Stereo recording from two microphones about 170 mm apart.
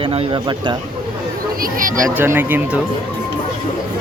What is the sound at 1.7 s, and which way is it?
Speech, 50° right (ahead or behind).